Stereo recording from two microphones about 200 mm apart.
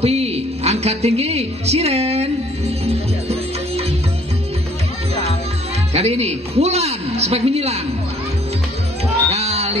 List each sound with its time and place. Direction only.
0.0 s a woman's voice: 30° right (ahead or behind)
5.9 s a man's voice: 30° right (ahead or behind)
9.3 s music: 30° right (ahead or behind)